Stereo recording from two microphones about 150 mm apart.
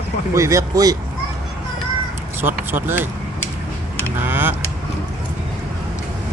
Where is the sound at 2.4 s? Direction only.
15° right (ahead or behind).